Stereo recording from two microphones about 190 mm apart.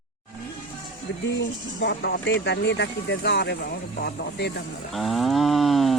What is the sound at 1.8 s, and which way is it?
Speech, 60° left (ahead or behind).